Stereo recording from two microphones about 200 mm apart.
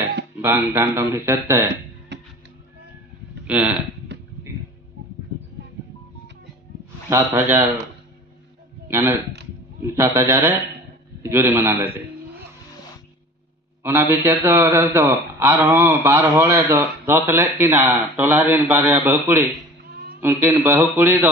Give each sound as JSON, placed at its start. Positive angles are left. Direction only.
{"t": 0.4, "sound": "a man's voice", "side_deg": -10}
{"t": 2.1, "sound": "music", "side_deg": -60}
{"t": 3.4, "sound": "speech", "side_deg": -5}
{"t": 7.1, "sound": "a man's voice", "side_deg": -10}
{"t": 8.8, "sound": "a man's voice", "side_deg": -10}
{"t": 13.8, "sound": "a man's voice", "side_deg": -10}